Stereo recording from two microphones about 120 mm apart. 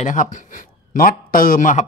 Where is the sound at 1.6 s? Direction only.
90° left.